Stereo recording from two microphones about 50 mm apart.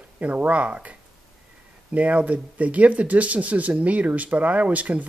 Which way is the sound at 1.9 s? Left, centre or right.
Right.